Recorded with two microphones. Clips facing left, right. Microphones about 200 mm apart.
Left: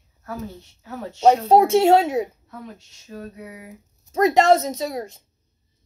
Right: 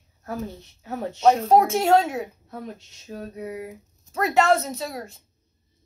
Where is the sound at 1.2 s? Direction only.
30° left (ahead or behind).